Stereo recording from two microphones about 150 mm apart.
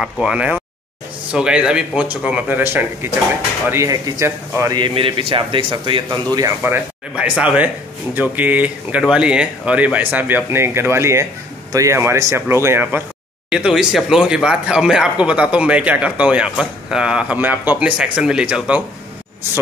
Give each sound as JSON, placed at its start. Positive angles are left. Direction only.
{"t": 0.0, "sound": "a man's voice", "side_deg": -5}
{"t": 4.7, "sound": "a man's voice", "side_deg": -35}
{"t": 6.0, "sound": "speech", "side_deg": -20}